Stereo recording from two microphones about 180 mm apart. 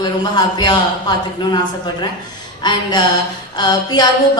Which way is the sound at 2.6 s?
25° left (ahead or behind).